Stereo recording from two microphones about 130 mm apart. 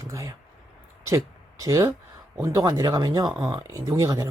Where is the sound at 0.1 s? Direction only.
25° right (ahead or behind).